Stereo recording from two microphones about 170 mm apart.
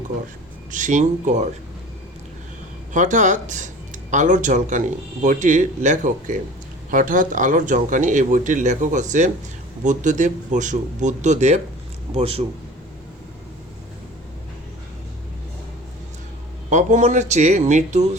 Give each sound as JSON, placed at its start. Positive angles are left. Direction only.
{"t": 0.7, "sound": "speech", "side_deg": -50}
{"t": 2.9, "sound": "a man's voice", "side_deg": -45}
{"t": 16.6, "sound": "speech", "side_deg": -45}